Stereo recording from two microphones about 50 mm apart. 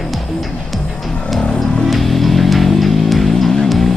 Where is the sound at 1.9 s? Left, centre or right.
Centre.